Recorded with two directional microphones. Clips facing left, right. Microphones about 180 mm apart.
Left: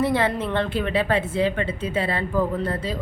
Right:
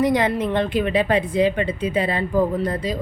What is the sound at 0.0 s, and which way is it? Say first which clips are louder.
Speech: right 3 dB; 15° right (ahead or behind).